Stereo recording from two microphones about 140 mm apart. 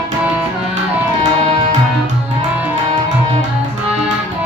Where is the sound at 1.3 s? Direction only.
50° right (ahead or behind).